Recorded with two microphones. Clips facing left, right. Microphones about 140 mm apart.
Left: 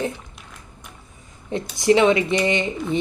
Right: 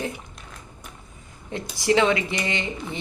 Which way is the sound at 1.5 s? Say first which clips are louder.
Left 5 dB; 20° left (ahead or behind).